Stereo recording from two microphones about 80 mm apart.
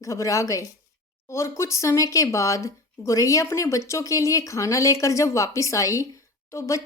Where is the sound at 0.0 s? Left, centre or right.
Left.